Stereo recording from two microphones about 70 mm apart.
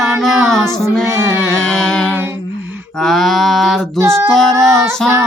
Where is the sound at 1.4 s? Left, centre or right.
Centre.